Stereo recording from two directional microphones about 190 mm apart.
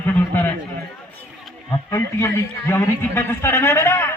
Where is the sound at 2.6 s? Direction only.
15° left (ahead or behind).